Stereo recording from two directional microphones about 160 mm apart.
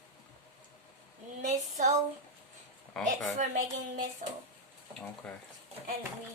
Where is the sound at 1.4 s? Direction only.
45° right (ahead or behind).